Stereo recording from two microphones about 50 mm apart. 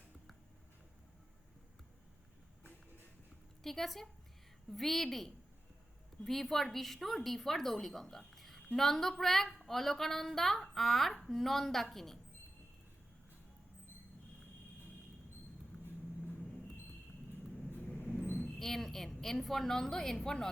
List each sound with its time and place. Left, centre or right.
3.6 s a woman's voice: centre
17.8 s vehicle: left
18.6 s a woman's voice: centre